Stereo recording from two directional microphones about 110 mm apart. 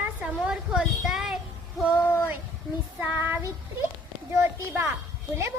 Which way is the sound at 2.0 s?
20° left (ahead or behind).